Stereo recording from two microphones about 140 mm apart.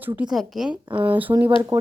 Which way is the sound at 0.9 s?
40° right (ahead or behind).